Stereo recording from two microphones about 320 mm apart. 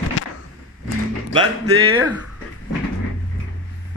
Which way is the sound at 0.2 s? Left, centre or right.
Left.